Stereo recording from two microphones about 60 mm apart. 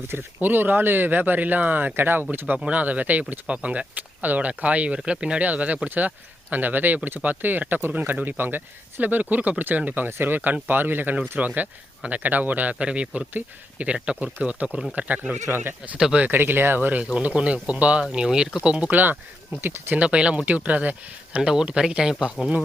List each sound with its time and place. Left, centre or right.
0.3 s speech: right
2.6 s speech: right
15.4 s speech: right
17.2 s speech: centre; by 20.0 s right
20.0 s speech: centre
21.3 s speech: centre